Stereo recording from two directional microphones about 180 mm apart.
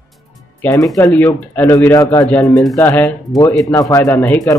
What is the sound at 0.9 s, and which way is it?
Speech, 15° left (ahead or behind).